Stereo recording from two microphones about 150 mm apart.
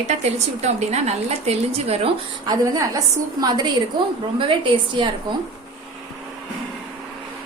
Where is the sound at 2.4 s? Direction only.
25° right (ahead or behind).